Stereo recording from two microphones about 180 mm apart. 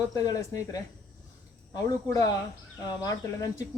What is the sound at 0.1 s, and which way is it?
Speech, 20° left (ahead or behind).